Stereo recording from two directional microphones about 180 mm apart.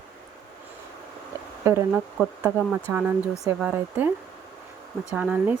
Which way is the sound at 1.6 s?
15° right (ahead or behind).